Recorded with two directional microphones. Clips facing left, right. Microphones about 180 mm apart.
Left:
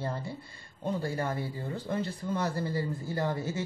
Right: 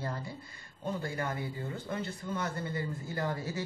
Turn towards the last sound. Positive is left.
turn(degrees=25)  # may be behind; listen again after turning